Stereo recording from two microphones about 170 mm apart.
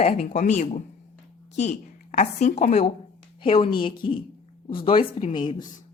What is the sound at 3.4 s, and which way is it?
A woman's voice, 30° left (ahead or behind).